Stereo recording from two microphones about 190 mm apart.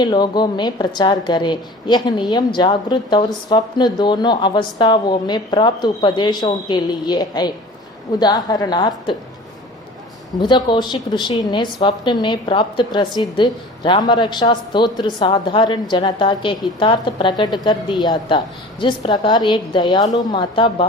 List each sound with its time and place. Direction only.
0.0 s a woman's voice: 25° left (ahead or behind)
10.3 s a woman's voice: 20° left (ahead or behind)